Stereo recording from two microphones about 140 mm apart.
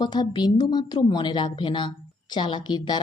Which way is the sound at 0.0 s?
30° left (ahead or behind).